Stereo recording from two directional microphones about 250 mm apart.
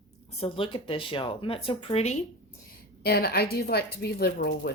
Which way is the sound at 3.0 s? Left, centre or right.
Left.